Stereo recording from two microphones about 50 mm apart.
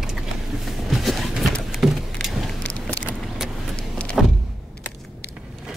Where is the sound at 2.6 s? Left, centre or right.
Left.